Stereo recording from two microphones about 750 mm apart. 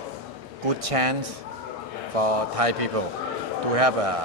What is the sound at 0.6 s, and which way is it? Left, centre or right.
Speech, right.